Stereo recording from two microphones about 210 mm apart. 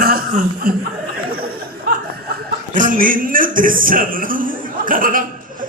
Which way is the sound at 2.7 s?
40° right (ahead or behind).